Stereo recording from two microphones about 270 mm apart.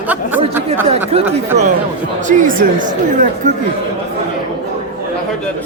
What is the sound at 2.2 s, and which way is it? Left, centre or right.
Speech, right.